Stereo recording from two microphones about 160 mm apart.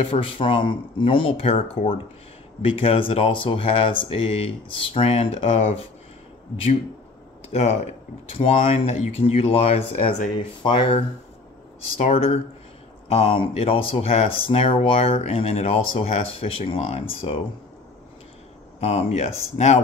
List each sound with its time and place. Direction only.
0.0 s speech: 35° left (ahead or behind)
7.5 s speech: 40° left (ahead or behind)
18.8 s speech: 40° left (ahead or behind)